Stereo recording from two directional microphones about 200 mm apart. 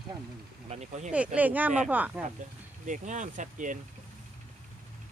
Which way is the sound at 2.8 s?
40° right (ahead or behind).